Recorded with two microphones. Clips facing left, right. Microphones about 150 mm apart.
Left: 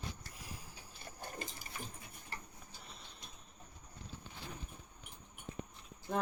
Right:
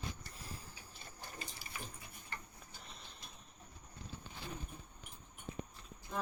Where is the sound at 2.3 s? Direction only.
35° left (ahead or behind).